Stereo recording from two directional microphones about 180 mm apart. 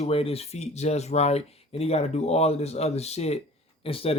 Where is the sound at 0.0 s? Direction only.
35° left (ahead or behind).